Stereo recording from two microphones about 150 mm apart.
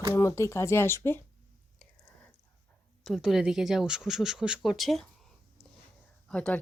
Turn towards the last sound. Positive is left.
turn(degrees=5)  # may be behind; listen again after turning